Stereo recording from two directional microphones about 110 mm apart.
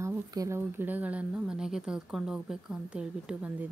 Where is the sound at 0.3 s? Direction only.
35° right (ahead or behind).